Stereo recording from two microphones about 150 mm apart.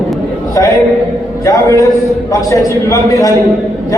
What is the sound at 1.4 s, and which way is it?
A man's voice, 20° left (ahead or behind).